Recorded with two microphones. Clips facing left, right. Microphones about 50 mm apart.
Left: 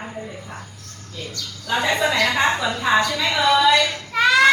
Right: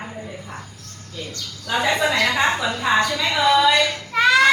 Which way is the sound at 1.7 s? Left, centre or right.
Centre.